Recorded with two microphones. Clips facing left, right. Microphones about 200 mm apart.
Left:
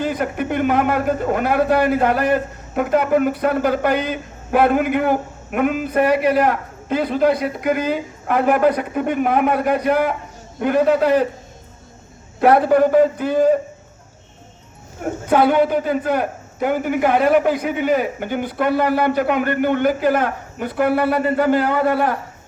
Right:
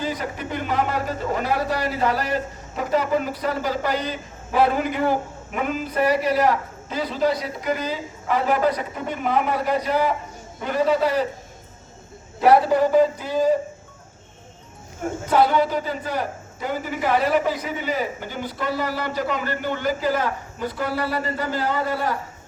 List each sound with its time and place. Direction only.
0.0 s a man's voice: 55° left (ahead or behind)
12.4 s a man's voice: 55° left (ahead or behind)
15.3 s a man's voice: 55° left (ahead or behind)